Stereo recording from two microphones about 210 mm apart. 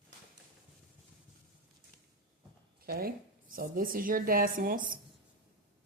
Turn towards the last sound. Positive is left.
turn(degrees=-40)  # may be behind; listen again after turning